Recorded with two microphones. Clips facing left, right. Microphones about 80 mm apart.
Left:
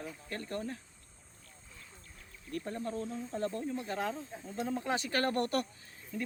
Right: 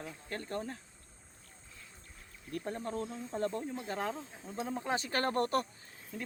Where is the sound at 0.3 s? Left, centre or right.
Right.